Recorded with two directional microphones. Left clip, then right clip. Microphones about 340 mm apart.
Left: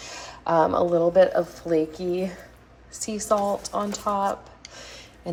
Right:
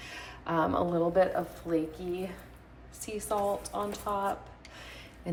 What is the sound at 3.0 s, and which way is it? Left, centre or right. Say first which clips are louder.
A woman's voice: left 8 dB; centre.